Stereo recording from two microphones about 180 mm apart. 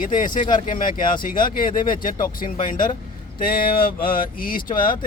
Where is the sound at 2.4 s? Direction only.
30° left (ahead or behind).